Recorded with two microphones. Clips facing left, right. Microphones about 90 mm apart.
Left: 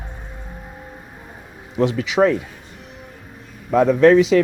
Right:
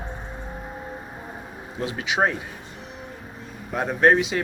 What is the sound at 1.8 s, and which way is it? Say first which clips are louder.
Speech: left 7 dB; 85° left.